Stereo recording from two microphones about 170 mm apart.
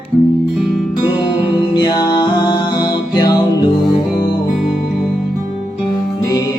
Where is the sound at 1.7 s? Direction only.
25° left (ahead or behind).